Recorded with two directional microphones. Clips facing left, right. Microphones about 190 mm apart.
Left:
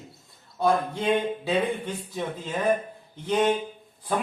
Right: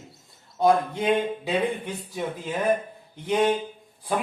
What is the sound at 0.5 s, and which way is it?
Speech, 15° right (ahead or behind).